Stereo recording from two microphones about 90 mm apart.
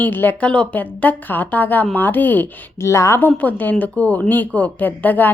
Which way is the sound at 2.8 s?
35° left (ahead or behind).